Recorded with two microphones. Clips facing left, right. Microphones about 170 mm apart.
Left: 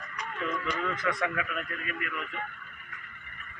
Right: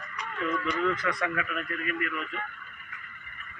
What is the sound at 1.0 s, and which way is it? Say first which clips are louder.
Speech: even; 20° left (ahead or behind).